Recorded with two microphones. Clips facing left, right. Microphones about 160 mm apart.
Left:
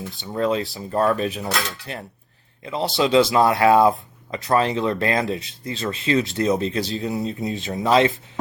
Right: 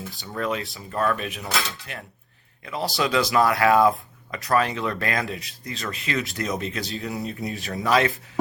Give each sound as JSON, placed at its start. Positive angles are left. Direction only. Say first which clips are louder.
{"t": 0.2, "sound": "speech", "louder": "left 6 dB", "side_deg": 25}